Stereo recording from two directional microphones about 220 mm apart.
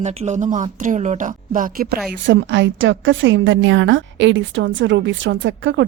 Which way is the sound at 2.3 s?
50° right (ahead or behind).